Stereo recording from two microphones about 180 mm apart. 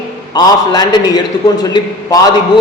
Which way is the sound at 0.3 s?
20° left (ahead or behind).